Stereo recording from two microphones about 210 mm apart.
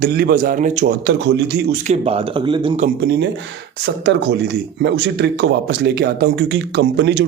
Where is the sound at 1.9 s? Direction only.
30° right (ahead or behind).